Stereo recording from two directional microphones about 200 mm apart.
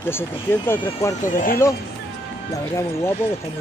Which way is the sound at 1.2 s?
45° left (ahead or behind).